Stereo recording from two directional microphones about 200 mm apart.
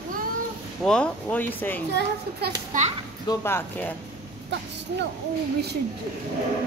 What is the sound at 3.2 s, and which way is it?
Speech, 15° left (ahead or behind).